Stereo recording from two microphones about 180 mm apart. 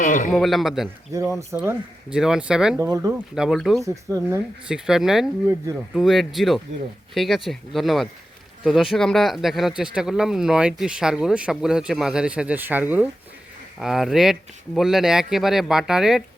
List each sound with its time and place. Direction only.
0.0 s a man's voice: 45° left (ahead or behind)
0.3 s speech: centre (ahead or behind)
1.1 s speech: 15° right (ahead or behind)
1.5 s speech: 5° right (ahead or behind)
3.8 s speech: 15° right (ahead or behind)
4.7 s speech: 5° right (ahead or behind)